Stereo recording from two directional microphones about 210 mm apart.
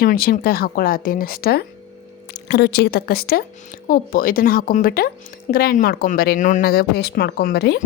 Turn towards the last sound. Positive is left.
turn(degrees=50)  # may be behind; listen again after turning